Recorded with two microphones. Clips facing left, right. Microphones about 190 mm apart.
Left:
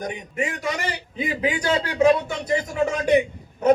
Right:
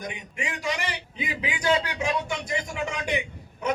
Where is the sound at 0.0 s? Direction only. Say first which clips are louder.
Left 7 dB; 45° left (ahead or behind).